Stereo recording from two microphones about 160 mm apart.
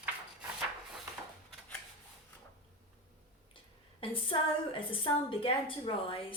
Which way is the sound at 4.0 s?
35° left (ahead or behind).